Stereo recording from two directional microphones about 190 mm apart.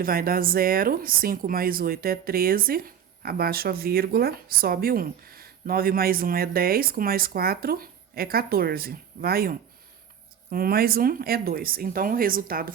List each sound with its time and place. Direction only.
0.0 s speech: 50° right (ahead or behind)